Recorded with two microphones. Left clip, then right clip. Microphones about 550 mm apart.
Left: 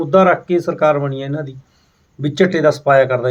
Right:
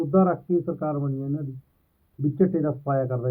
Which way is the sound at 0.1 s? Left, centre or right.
Centre.